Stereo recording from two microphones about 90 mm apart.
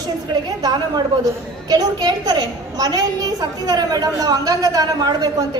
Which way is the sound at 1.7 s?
45° right (ahead or behind).